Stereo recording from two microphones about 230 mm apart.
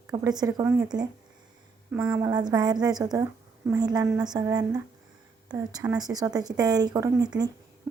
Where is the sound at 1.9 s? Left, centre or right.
Centre.